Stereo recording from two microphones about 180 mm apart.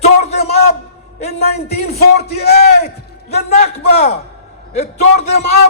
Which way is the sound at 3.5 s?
40° left (ahead or behind).